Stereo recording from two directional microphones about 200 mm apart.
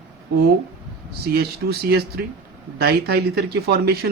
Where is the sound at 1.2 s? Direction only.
50° right (ahead or behind).